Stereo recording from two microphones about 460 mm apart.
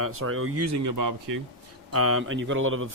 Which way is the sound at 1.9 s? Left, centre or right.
Right.